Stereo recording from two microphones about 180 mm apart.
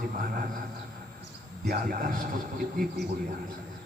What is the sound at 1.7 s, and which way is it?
A man's voice, 55° right (ahead or behind).